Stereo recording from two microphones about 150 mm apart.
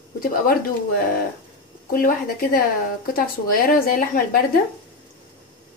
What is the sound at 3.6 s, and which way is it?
Speech, 85° left.